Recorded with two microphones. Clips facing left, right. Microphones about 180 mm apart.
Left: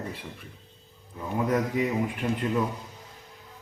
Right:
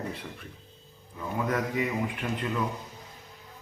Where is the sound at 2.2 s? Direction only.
20° left (ahead or behind).